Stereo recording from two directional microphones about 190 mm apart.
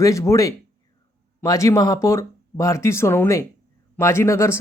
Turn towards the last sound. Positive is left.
turn(degrees=15)  # may be behind; listen again after turning